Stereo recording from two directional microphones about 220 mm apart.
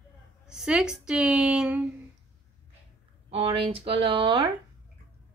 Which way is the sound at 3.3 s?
25° right (ahead or behind).